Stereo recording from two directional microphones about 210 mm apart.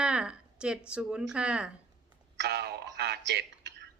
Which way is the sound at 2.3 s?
50° right (ahead or behind).